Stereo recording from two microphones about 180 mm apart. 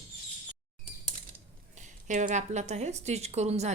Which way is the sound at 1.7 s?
40° right (ahead or behind).